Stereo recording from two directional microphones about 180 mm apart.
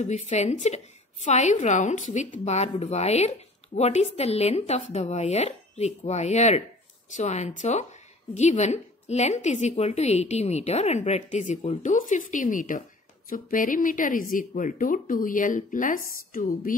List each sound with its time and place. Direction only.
0.0 s a woman's voice: 40° left (ahead or behind)